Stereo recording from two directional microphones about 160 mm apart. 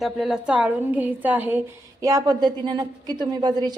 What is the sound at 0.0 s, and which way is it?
A woman's voice, 5° right (ahead or behind).